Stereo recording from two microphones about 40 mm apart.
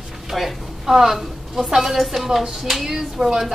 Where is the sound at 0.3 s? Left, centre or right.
Centre.